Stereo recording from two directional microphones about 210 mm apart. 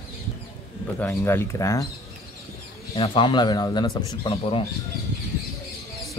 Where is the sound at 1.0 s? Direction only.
10° left (ahead or behind).